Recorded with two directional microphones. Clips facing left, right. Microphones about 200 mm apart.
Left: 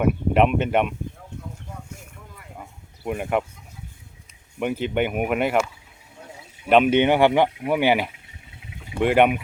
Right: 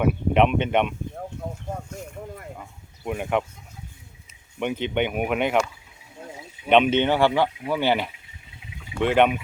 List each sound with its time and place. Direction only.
0.0 s speech: 5° left (ahead or behind)
2.6 s a sound: 5° left (ahead or behind)
4.6 s speech: 5° left (ahead or behind)
7.0 s speech: 15° left (ahead or behind)